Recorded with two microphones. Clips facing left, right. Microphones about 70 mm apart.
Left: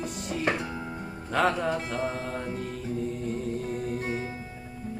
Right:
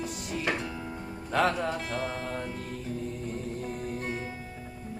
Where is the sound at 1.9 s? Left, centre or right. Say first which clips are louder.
Left 2 dB; left.